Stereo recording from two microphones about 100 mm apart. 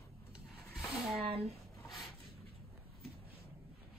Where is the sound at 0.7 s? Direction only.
5° right (ahead or behind).